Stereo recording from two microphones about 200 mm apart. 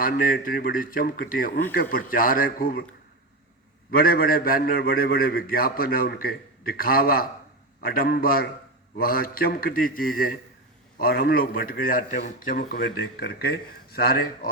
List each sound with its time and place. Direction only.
0.0 s a man's voice: 45° left (ahead or behind)
3.9 s a man's voice: 45° left (ahead or behind)